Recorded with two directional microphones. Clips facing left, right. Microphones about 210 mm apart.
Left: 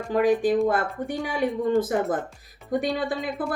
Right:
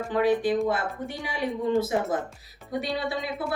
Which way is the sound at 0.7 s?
50° left (ahead or behind).